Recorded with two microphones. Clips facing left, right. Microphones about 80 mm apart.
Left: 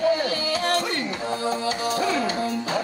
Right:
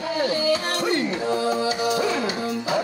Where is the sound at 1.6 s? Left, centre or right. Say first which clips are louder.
Right 2 dB; left.